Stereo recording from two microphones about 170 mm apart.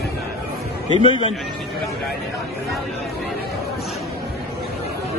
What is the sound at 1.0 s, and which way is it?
Speech, 30° left (ahead or behind).